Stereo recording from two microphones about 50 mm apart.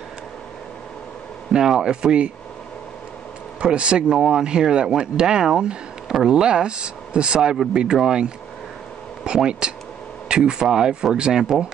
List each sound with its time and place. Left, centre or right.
1.5 s speech: centre
3.6 s speech: centre